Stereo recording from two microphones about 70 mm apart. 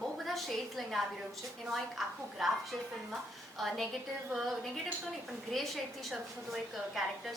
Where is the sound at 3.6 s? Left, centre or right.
Centre.